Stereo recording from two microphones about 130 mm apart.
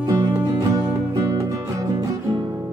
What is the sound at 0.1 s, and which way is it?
Music, 30° right (ahead or behind).